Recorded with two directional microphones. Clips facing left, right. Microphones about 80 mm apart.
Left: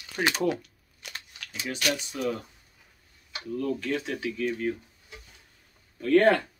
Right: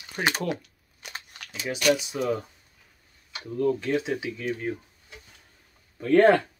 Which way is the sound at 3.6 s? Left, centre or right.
Right.